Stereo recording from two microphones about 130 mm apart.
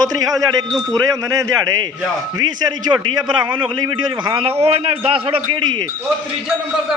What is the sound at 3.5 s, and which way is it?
A man's voice, 40° right (ahead or behind).